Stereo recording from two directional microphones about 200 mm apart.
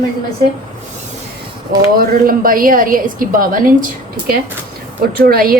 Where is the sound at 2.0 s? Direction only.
45° right (ahead or behind).